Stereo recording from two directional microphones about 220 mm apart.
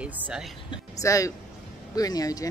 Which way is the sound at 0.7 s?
15° left (ahead or behind).